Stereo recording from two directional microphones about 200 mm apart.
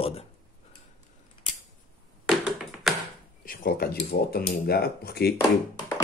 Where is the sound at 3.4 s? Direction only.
45° left (ahead or behind).